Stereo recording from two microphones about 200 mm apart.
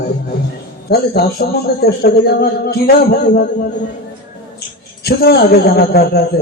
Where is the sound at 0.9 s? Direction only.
50° left (ahead or behind).